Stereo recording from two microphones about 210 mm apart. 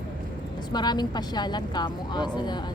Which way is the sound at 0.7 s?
20° left (ahead or behind).